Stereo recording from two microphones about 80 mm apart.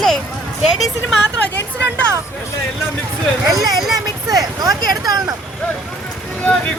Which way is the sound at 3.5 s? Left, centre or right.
Right.